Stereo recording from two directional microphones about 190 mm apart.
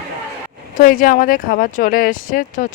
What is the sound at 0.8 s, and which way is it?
Speech, 45° left (ahead or behind).